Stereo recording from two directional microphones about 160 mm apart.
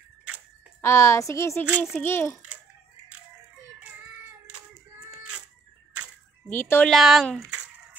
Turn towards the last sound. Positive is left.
turn(degrees=0)  # may be behind; listen again after turning